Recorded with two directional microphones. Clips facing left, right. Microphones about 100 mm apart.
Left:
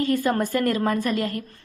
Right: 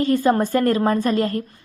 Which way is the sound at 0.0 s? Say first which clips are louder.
Right 4 dB; 25° right (ahead or behind).